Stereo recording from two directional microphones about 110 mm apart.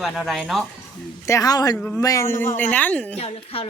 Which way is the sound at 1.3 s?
30° left (ahead or behind).